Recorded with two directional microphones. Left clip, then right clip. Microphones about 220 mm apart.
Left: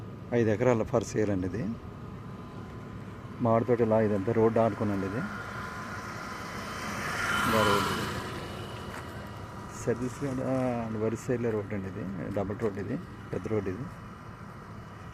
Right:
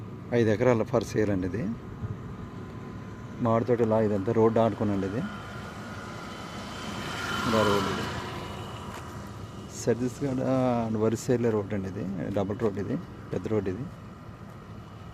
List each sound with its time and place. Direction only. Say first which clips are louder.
0.3 s speech: right 2 dB; centre (ahead or behind)
3.4 s speech: right 1 dB; centre (ahead or behind)
6.6 s vehicle: left 2 dB; 15° left (ahead or behind); by 8.6 s 45° left (ahead or behind)
9.8 s speech: right 4 dB; 15° right (ahead or behind)